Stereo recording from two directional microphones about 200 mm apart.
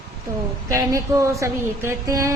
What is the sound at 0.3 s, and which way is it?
Speech, 15° right (ahead or behind).